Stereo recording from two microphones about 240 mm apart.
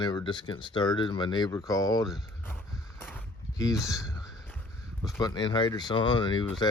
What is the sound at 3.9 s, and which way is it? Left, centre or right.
Speech, centre.